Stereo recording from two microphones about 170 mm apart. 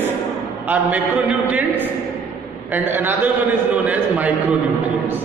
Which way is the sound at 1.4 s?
10° right (ahead or behind).